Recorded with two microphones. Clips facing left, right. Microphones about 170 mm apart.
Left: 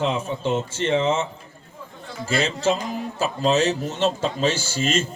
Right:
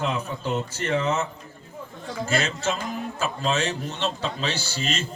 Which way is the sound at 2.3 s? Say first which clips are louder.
Left 5 dB; 30° left (ahead or behind).